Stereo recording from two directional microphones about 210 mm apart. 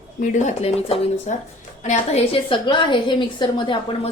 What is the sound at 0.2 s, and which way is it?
A woman's voice, 35° left (ahead or behind).